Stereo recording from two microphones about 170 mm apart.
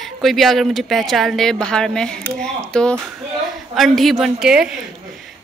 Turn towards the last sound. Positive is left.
turn(degrees=-5)  # may be behind; listen again after turning